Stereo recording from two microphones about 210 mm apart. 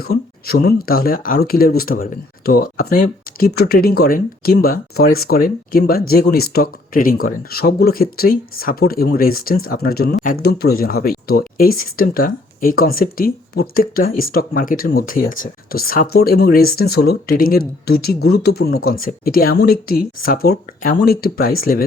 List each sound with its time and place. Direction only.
0.0 s speech: 45° left (ahead or behind)